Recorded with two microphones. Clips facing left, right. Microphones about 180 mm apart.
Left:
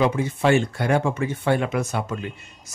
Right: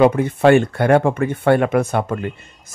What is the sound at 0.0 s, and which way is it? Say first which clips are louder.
A man's voice: right 7 dB; 60° right (ahead or behind).